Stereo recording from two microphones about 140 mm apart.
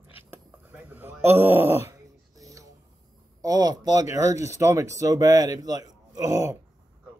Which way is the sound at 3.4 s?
25° right (ahead or behind).